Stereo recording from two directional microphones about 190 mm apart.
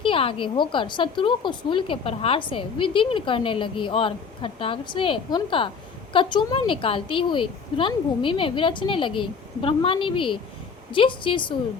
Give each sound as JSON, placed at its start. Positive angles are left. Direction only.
{"t": 0.0, "sound": "a woman's voice", "side_deg": 30}